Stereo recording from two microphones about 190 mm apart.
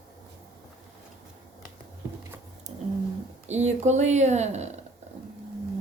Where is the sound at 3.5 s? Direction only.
35° right (ahead or behind).